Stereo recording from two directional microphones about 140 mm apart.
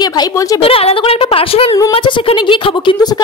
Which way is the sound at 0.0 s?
25° left (ahead or behind).